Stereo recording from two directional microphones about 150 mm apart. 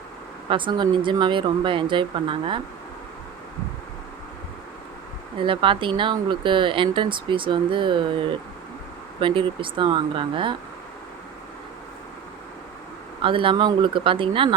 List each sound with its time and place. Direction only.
0.4 s speech: 35° right (ahead or behind)
5.4 s speech: 35° right (ahead or behind)
13.2 s speech: 35° right (ahead or behind)